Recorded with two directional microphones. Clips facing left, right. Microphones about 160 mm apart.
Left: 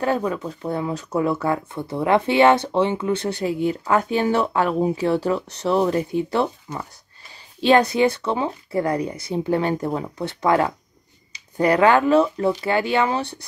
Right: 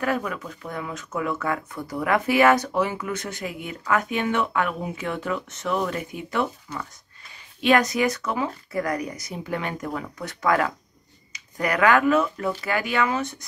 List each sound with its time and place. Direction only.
0.0 s speech: 30° left (ahead or behind)